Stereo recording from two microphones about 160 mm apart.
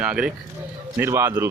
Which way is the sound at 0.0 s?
5° right (ahead or behind).